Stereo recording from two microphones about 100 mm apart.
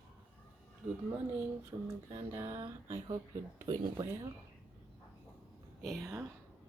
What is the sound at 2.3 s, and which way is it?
Speech, 25° right (ahead or behind).